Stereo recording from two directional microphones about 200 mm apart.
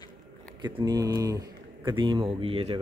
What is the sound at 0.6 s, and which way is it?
Speech, 20° right (ahead or behind).